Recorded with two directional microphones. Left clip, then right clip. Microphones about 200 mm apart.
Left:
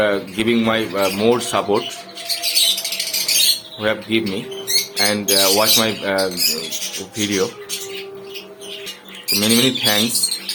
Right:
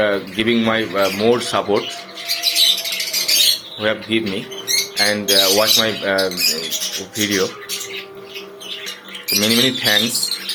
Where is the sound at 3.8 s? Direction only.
15° left (ahead or behind).